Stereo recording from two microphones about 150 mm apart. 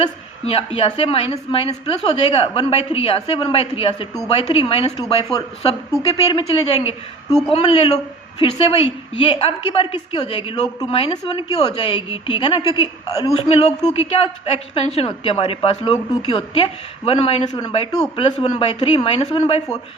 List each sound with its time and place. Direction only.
0.0 s a woman's voice: 40° left (ahead or behind)
6.0 s a woman's voice: 30° left (ahead or behind)
6.4 s a woman's voice: 45° left (ahead or behind)
13.1 s a man's voice: 25° left (ahead or behind)
13.5 s a woman's voice: 45° left (ahead or behind)
17.5 s a man's voice: 30° left (ahead or behind)
18.2 s a woman's voice: 40° left (ahead or behind)